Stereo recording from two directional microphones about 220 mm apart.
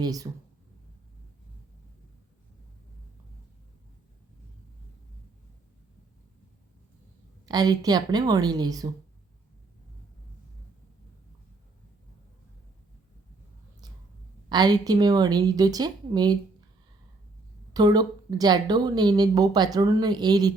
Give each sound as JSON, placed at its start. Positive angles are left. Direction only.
{"t": 0.0, "sound": "a woman's voice", "side_deg": -15}
{"t": 7.4, "sound": "a woman's voice", "side_deg": -20}
{"t": 14.5, "sound": "a woman's voice", "side_deg": -20}
{"t": 17.7, "sound": "a woman's voice", "side_deg": -20}